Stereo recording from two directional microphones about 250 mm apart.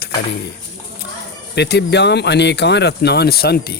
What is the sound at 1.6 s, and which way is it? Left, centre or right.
Speech, left.